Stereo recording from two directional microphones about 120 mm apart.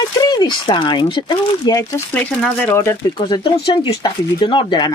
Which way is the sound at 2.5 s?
15° left (ahead or behind).